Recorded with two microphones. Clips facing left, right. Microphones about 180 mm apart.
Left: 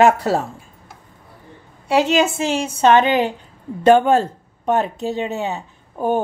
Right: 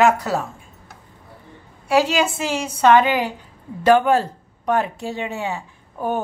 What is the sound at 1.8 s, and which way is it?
A woman's voice, 25° left (ahead or behind).